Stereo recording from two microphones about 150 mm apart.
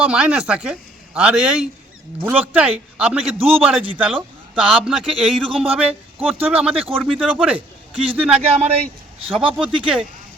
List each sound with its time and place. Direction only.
0.0 s a man's voice: 5° right (ahead or behind)
8.5 s speech: 40° right (ahead or behind)
9.4 s a man's voice: 5° right (ahead or behind)